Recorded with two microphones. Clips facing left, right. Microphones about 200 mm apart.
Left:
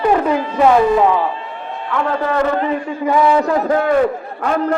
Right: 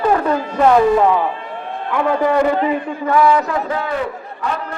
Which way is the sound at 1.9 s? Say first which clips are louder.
Right 3 dB; 15° right (ahead or behind).